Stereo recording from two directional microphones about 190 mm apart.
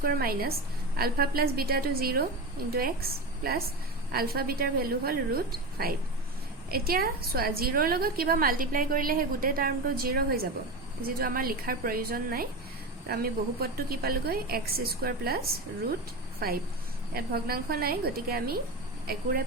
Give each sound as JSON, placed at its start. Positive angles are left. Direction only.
{"t": 0.0, "sound": "a woman's voice", "side_deg": -50}